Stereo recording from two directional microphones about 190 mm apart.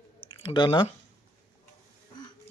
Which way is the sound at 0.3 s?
25° left (ahead or behind).